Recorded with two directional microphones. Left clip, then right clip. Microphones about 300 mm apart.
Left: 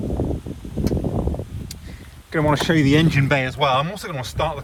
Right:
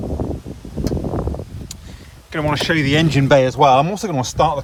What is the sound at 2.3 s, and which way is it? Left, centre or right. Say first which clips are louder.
Speech: right 1 dB; centre.